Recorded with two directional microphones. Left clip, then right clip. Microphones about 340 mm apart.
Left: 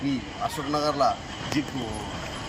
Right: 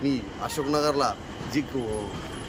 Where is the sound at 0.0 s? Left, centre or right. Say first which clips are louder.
Even; centre.